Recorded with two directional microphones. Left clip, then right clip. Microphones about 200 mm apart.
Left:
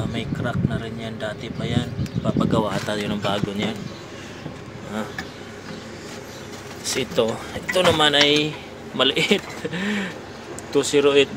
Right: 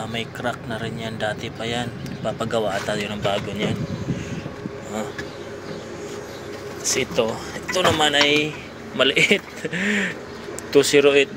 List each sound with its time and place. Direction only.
0.1 s speech: 5° left (ahead or behind)
2.5 s speech: 20° left (ahead or behind)
6.8 s speech: 20° left (ahead or behind)
9.0 s speech: 5° left (ahead or behind)